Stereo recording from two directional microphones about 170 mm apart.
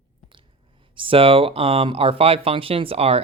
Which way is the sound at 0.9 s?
30° right (ahead or behind).